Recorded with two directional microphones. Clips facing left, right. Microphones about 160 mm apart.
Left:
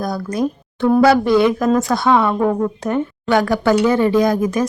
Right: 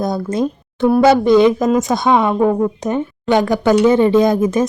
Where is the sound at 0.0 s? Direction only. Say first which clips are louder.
Right 2 dB; 25° right (ahead or behind).